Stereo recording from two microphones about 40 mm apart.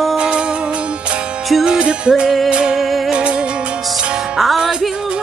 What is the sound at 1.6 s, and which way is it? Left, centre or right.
Music, right.